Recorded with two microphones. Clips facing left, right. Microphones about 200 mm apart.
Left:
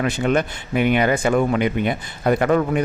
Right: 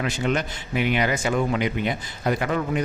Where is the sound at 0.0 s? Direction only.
50° left (ahead or behind).